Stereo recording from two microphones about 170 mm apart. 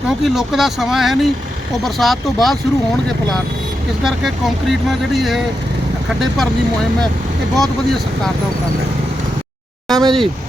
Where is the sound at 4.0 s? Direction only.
Centre (ahead or behind).